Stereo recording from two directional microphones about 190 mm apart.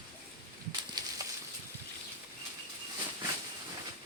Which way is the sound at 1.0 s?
20° right (ahead or behind).